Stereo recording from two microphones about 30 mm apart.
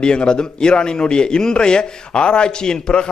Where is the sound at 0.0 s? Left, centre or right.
Left.